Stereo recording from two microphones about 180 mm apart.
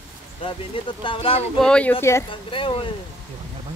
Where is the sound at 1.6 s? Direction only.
5° left (ahead or behind).